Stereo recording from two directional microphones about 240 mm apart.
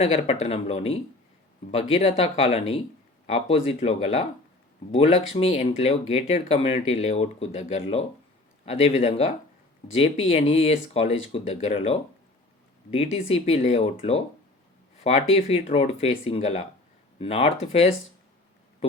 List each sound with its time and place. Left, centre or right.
0.0 s speech: left
15.0 s speech: left